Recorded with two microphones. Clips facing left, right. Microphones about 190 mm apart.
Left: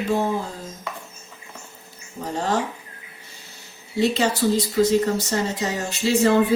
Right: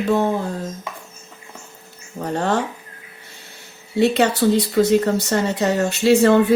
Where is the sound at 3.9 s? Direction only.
60° right (ahead or behind).